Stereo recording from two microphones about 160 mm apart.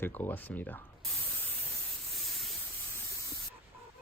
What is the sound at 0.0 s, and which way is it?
Speech, 10° left (ahead or behind).